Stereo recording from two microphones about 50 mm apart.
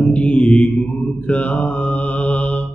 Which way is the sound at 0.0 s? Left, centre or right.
Left.